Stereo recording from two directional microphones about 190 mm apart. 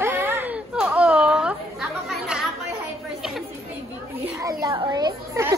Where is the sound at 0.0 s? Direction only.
10° right (ahead or behind).